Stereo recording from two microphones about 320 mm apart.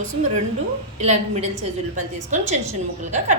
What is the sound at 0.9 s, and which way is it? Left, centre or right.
Speech, right.